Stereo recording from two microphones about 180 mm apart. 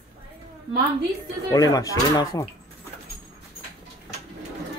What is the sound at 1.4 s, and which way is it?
Speech, 20° left (ahead or behind).